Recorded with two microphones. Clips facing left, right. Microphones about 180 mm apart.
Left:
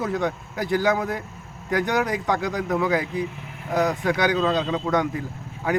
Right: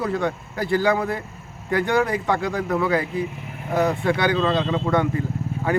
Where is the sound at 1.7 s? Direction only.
15° left (ahead or behind).